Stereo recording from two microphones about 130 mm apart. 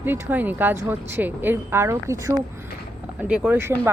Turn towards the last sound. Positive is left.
turn(degrees=-15)  # may be behind; listen again after turning